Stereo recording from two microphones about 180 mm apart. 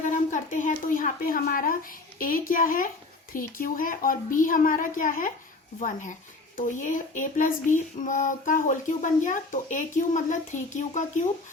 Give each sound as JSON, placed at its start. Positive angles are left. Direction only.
{"t": 0.0, "sound": "a woman's voice", "side_deg": 45}
{"t": 6.6, "sound": "speech", "side_deg": 45}